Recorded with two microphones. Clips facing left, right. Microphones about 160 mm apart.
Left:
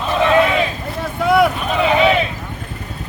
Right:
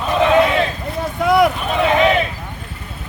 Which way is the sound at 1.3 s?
Centre (ahead or behind).